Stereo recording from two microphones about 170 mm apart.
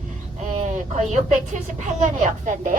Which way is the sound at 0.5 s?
45° right (ahead or behind).